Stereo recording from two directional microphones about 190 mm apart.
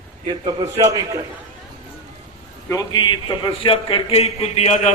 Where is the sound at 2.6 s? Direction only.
20° left (ahead or behind).